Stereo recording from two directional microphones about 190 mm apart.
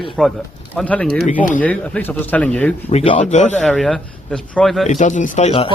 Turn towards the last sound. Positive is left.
turn(degrees=35)  # may be behind; listen again after turning